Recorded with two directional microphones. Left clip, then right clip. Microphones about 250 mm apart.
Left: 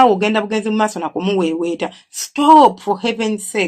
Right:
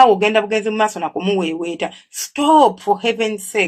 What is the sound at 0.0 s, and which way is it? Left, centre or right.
Speech, left.